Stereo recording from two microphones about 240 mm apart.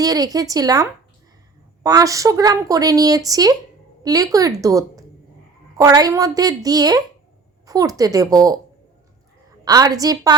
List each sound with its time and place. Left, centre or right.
0.0 s a woman's voice: centre
9.6 s a woman's voice: centre